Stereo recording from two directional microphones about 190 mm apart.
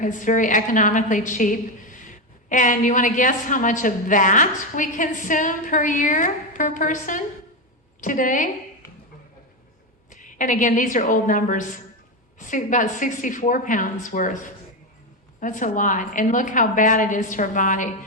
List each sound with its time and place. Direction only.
0.0 s a woman's voice: 45° left (ahead or behind)
10.1 s a woman's voice: 45° left (ahead or behind)